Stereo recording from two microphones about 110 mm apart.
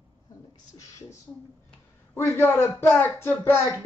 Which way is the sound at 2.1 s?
20° left (ahead or behind).